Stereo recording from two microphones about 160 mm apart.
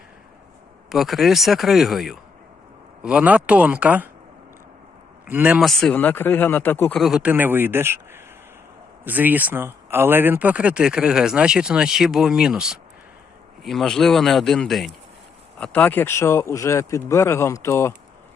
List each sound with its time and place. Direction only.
0.9 s speech: centre (ahead or behind)
5.2 s speech: 10° right (ahead or behind); by 7.0 s 15° left (ahead or behind)
7.0 s speech: 5° right (ahead or behind); by 17.9 s 15° left (ahead or behind)